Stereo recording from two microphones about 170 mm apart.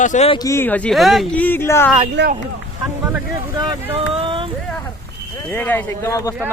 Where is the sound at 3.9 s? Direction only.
30° right (ahead or behind).